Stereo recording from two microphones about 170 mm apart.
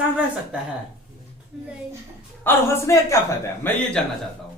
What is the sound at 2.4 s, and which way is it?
A woman's voice, 15° left (ahead or behind).